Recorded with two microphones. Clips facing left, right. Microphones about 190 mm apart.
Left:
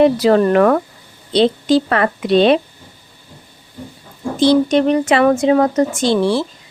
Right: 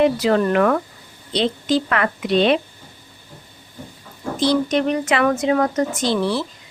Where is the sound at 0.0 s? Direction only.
35° left (ahead or behind).